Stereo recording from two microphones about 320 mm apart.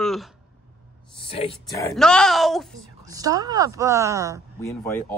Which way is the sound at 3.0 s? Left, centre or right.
Centre.